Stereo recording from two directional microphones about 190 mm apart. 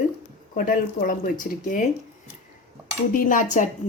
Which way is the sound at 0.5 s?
45° left (ahead or behind).